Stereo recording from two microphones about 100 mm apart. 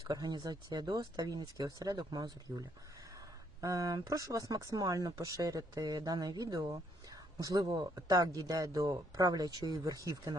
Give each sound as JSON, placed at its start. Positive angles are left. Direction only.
{"t": 0.1, "sound": "speech", "side_deg": -45}